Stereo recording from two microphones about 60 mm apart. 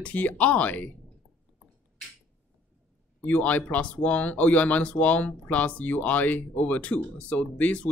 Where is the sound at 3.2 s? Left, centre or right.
Left.